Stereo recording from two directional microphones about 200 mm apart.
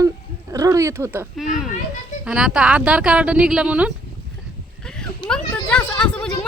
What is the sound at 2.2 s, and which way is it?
Speech, 5° right (ahead or behind).